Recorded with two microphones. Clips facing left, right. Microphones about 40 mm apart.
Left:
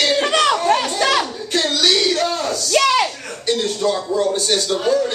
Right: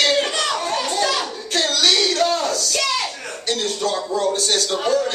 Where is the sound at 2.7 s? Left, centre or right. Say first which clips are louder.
Left 11 dB; left.